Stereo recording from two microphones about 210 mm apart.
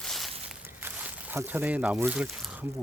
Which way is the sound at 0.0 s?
Centre (ahead or behind).